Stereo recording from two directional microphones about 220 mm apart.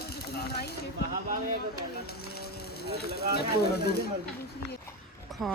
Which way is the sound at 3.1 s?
45° left (ahead or behind).